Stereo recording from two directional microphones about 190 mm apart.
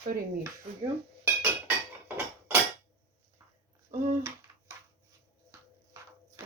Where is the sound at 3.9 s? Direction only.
40° right (ahead or behind).